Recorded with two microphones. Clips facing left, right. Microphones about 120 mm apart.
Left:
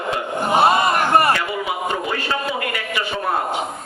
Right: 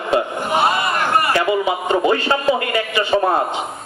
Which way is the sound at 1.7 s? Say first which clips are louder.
Right 6 dB; 30° right (ahead or behind).